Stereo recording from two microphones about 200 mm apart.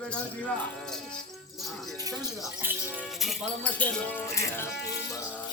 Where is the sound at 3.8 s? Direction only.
10° left (ahead or behind).